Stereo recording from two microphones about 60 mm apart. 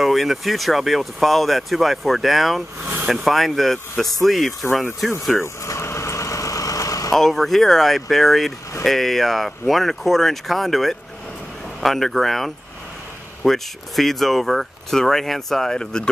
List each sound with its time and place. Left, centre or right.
0.0 s speech: centre
5.7 s vehicle: left
7.1 s speech: centre